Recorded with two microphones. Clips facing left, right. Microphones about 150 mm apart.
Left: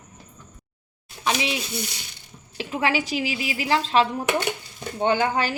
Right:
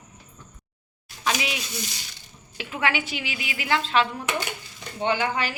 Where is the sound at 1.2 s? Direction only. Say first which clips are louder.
Left 2 dB; 30° left (ahead or behind).